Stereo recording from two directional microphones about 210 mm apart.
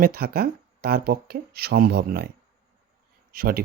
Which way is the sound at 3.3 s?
45° right (ahead or behind).